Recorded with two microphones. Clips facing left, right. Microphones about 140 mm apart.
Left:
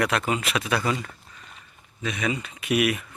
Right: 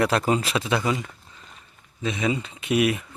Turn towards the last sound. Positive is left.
turn(degrees=-25)  # may be behind; listen again after turning